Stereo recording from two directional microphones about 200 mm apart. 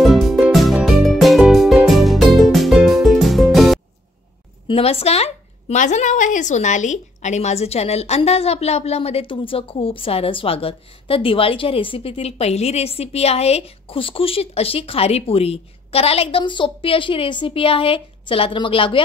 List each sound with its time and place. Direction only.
0.0 s music: centre (ahead or behind)
4.6 s a woman's voice: 30° left (ahead or behind)